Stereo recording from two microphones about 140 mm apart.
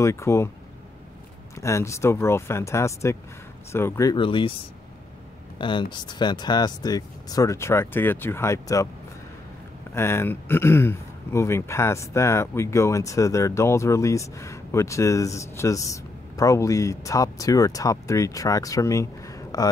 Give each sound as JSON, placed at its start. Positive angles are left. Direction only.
{"t": 0.0, "sound": "speech", "side_deg": 20}
{"t": 1.6, "sound": "speech", "side_deg": 20}
{"t": 4.1, "sound": "speech", "side_deg": 35}
{"t": 5.6, "sound": "speech", "side_deg": 35}
{"t": 9.9, "sound": "speech", "side_deg": 20}